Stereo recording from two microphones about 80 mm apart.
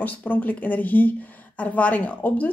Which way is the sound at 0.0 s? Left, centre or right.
Centre.